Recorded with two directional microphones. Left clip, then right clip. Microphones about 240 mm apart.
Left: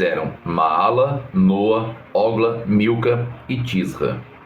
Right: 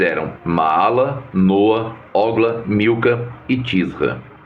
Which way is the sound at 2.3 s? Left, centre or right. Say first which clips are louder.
Right 2 dB; centre.